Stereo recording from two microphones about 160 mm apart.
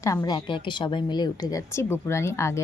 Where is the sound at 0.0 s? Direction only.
20° left (ahead or behind).